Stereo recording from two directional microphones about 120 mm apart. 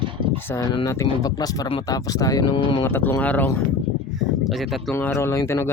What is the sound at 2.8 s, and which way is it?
Speech, 15° left (ahead or behind).